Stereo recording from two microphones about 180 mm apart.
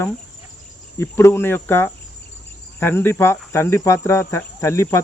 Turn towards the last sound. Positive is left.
turn(degrees=15)  # may be behind; listen again after turning